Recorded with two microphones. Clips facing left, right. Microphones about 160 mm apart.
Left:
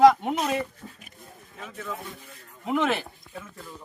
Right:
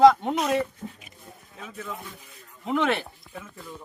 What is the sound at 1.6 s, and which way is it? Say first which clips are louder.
Speech: left 1 dB; centre (ahead or behind).